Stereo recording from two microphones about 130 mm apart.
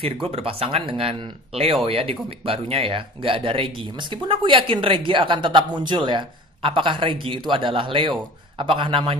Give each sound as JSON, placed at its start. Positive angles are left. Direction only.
{"t": 0.0, "sound": "a man's voice", "side_deg": -50}